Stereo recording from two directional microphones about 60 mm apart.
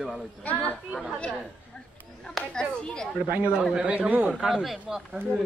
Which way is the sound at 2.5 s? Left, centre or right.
Centre.